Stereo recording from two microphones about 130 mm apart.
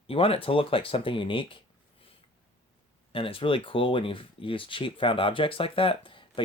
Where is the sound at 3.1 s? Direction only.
45° left (ahead or behind).